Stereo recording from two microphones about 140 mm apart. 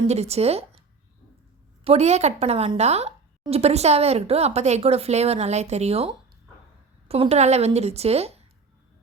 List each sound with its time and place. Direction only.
0.1 s speech: 50° right (ahead or behind)
1.8 s speech: 45° right (ahead or behind)